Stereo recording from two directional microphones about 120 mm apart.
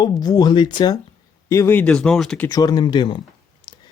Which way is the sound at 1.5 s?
20° left (ahead or behind).